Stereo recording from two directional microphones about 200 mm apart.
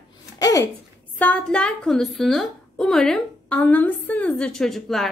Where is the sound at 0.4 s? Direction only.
15° left (ahead or behind).